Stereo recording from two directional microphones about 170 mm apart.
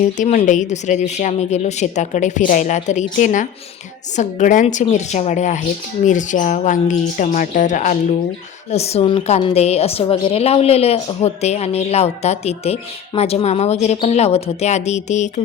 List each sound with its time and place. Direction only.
0.2 s a woman's voice: 45° left (ahead or behind)